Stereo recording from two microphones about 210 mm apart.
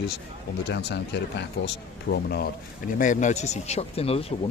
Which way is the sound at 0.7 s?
55° left (ahead or behind).